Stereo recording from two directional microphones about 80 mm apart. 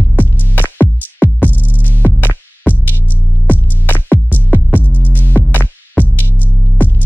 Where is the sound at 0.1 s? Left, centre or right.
Left.